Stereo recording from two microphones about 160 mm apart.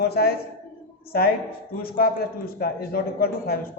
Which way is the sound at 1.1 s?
65° left (ahead or behind).